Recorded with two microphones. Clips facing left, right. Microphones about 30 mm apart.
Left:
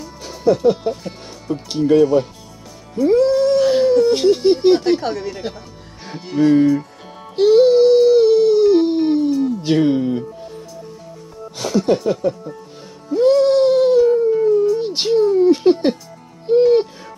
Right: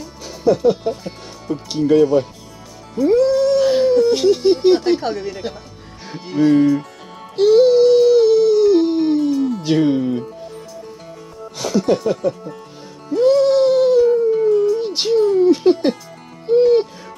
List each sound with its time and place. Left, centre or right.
0.0 s speech: centre
6.2 s music: centre
9.7 s speech: centre
11.5 s music: centre